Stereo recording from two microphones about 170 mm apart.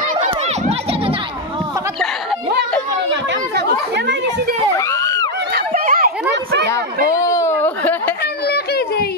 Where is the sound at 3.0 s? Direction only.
75° right (ahead or behind).